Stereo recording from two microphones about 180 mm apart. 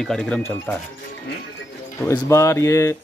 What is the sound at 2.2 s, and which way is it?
Speech, 15° left (ahead or behind).